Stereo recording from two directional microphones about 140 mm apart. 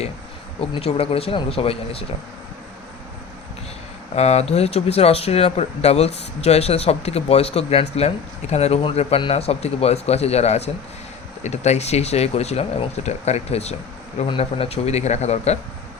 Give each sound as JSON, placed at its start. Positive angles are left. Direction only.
{"t": 0.7, "sound": "speech", "side_deg": 45}
{"t": 4.1, "sound": "speech", "side_deg": 50}